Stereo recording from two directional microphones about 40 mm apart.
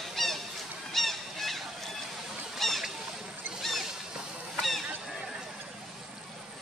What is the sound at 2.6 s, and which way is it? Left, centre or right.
Goose, centre.